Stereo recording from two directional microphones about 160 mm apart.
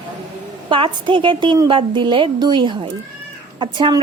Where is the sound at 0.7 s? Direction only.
35° right (ahead or behind).